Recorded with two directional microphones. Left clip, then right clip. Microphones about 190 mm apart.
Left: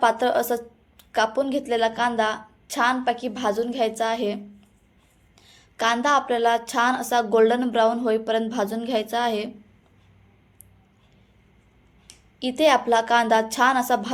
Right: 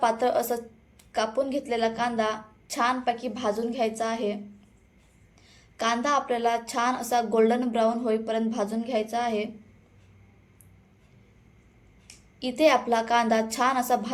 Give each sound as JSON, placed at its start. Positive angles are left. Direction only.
{"t": 0.0, "sound": "a woman's voice", "side_deg": 15}
{"t": 5.5, "sound": "a woman's voice", "side_deg": 15}
{"t": 12.4, "sound": "a woman's voice", "side_deg": 15}